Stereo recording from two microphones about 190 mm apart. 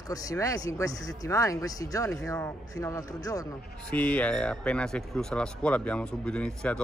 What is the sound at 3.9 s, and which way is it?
Speech, 5° left (ahead or behind).